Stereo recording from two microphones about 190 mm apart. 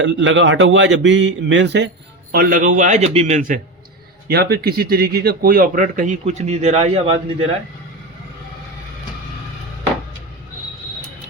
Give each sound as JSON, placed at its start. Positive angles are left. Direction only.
{"t": 0.0, "sound": "speech", "side_deg": -75}
{"t": 2.3, "sound": "a man's voice", "side_deg": -50}
{"t": 4.3, "sound": "a man's voice", "side_deg": -55}